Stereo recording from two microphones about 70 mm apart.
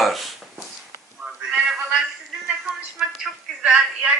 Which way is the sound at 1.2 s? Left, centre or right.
Centre.